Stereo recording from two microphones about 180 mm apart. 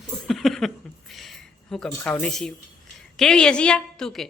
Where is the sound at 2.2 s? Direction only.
Centre (ahead or behind).